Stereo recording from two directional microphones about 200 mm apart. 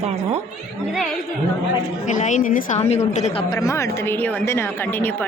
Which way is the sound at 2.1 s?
40° left (ahead or behind).